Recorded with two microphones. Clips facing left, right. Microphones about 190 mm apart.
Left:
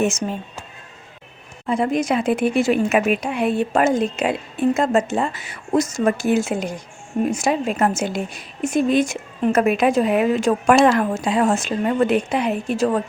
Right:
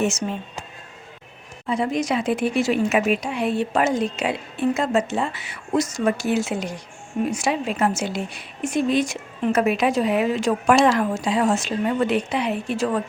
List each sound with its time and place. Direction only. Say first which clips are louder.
0.0 s speech: left 2 dB; 55° left (ahead or behind)
1.6 s speech: left 3 dB; 50° left (ahead or behind)